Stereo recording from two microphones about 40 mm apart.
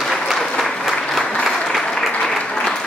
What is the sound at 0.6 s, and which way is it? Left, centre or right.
Applause, centre.